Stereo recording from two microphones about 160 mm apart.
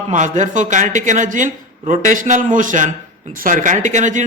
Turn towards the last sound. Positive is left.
turn(degrees=-50)  # may be behind; listen again after turning